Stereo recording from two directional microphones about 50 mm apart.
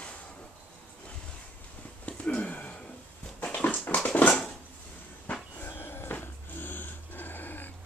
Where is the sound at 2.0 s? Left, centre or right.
Left.